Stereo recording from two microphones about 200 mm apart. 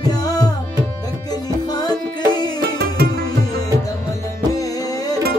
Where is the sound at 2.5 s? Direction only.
50° right (ahead or behind).